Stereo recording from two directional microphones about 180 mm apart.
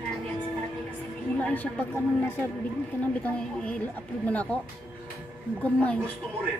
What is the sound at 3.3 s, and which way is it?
A woman's voice, 5° left (ahead or behind).